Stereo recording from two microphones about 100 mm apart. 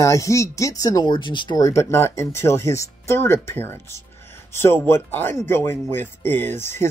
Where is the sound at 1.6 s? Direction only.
30° left (ahead or behind).